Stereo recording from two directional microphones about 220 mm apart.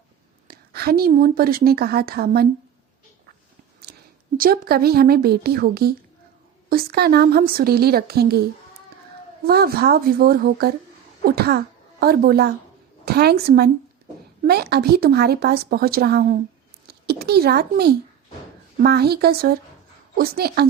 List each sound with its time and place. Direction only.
0.4 s a woman's voice: 45° right (ahead or behind)
3.9 s a sound: 50° right (ahead or behind)
4.4 s a woman's voice: 40° right (ahead or behind)
9.5 s a woman's voice: 45° right (ahead or behind)